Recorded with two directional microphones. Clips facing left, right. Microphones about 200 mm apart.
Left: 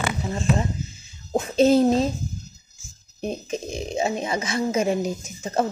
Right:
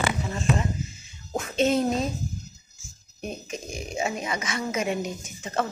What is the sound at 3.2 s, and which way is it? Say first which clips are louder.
Speech: left 6 dB; 30° left (ahead or behind).